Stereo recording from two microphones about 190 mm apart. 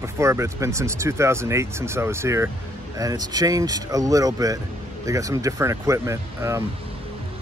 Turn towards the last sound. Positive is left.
turn(degrees=-15)  # may be behind; listen again after turning